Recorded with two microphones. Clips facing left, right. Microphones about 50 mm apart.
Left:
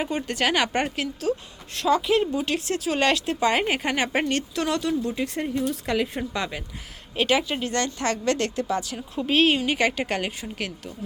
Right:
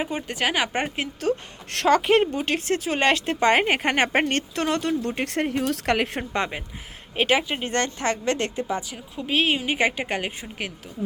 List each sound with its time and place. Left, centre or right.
0.0 s a woman's voice: centre
1.7 s speech: right
2.0 s speech: right
6.3 s speech: right
7.7 s speech: right
9.1 s a woman's voice: centre